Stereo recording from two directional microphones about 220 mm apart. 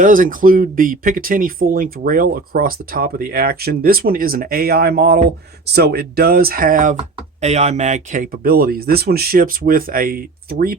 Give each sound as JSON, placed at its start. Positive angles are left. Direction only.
{"t": 0.0, "sound": "speech", "side_deg": -40}